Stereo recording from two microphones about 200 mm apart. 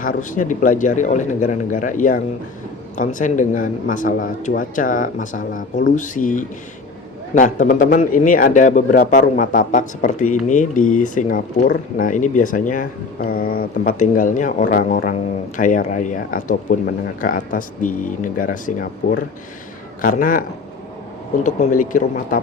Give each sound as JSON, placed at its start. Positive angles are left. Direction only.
{"t": 0.0, "sound": "speech", "side_deg": 40}
{"t": 20.0, "sound": "speech", "side_deg": 45}
{"t": 21.4, "sound": "speech", "side_deg": 40}